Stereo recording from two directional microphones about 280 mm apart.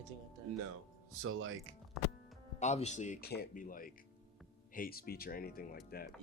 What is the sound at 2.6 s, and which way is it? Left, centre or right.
Speech, left.